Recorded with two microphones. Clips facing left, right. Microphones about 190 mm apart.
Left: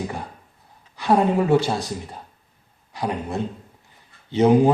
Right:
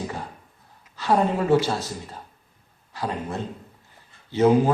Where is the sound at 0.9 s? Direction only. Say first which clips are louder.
Left 3 dB; 15° left (ahead or behind).